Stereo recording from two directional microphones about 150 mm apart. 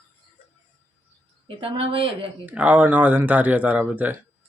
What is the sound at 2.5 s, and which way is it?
Speech, 10° right (ahead or behind).